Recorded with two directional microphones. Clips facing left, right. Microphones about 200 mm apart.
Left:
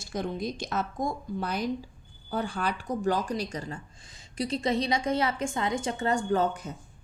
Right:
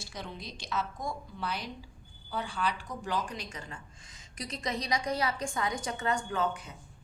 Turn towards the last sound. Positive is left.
turn(degrees=40)  # may be behind; listen again after turning